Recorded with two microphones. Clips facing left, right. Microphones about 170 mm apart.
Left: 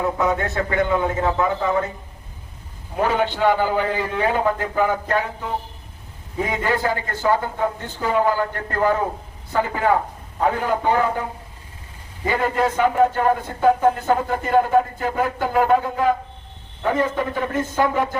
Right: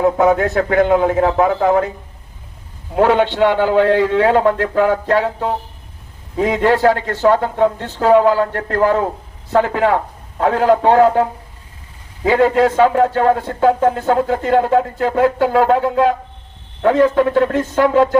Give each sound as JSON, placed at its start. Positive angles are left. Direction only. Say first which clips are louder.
{"t": 0.0, "sound": "a man's voice", "louder": "right 8 dB", "side_deg": -70}
{"t": 2.9, "sound": "speech", "louder": "right 7 dB", "side_deg": -85}